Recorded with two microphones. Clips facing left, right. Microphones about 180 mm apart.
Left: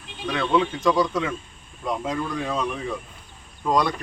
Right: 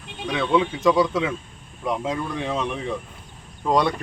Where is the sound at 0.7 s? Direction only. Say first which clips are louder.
Right 2 dB; 5° right (ahead or behind).